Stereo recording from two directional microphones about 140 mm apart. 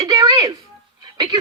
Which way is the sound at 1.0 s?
30° right (ahead or behind).